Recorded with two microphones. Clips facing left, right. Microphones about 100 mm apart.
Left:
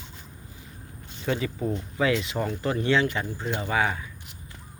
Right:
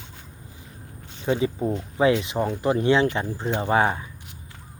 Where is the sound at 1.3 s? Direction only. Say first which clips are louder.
Right 4 dB; 25° right (ahead or behind).